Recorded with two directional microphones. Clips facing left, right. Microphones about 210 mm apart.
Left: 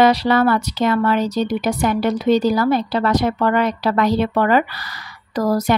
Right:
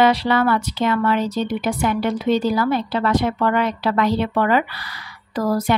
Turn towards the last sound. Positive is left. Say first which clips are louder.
# left 2 dB
turn(degrees=40)  # may be behind; listen again after turning